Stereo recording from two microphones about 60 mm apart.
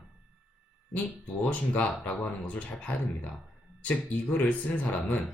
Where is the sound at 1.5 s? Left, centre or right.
Left.